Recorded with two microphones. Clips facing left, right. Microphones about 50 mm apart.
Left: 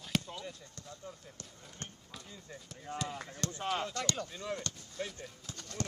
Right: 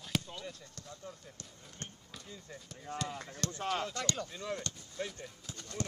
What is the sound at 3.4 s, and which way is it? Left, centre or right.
Speech, left.